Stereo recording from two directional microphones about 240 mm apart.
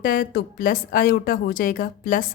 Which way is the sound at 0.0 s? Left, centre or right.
Left.